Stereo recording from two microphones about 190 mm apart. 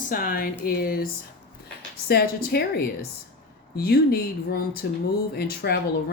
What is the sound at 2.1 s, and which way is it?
Speech, 55° left (ahead or behind).